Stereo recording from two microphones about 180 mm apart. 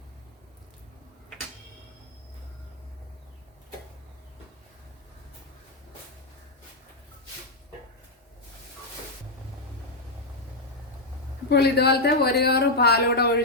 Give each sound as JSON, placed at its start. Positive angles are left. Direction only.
{"t": 11.4, "sound": "speech", "side_deg": 65}